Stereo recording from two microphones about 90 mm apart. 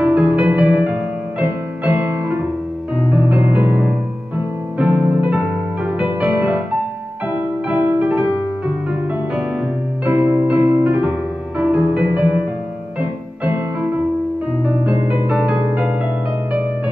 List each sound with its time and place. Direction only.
0.0 s music: 15° right (ahead or behind)
10.0 s music: 20° right (ahead or behind)
15.0 s music: 10° right (ahead or behind)